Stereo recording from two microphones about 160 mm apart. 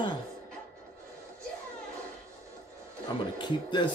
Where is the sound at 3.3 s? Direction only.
30° left (ahead or behind).